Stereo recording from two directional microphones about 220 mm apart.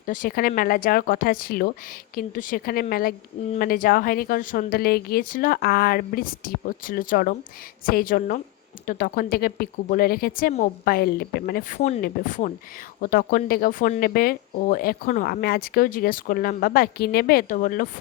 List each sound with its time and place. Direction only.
0.0 s speech: 40° left (ahead or behind)